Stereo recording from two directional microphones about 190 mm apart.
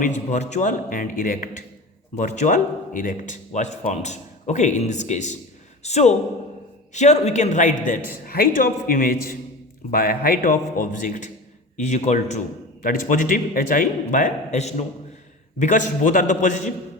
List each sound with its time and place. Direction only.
0.0 s a man's voice: 40° left (ahead or behind)